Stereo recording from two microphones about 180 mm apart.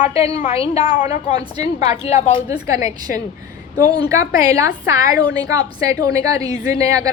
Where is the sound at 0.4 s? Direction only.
35° left (ahead or behind).